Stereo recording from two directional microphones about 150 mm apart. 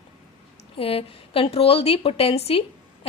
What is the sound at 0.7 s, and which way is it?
A woman's voice, 40° left (ahead or behind).